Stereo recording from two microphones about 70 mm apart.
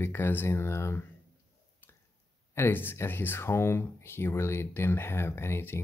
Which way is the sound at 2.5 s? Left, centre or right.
Left.